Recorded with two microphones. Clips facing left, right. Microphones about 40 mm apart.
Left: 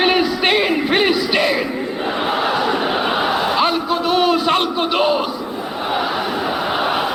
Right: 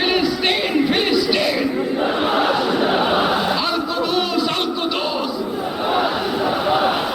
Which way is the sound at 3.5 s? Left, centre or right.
Left.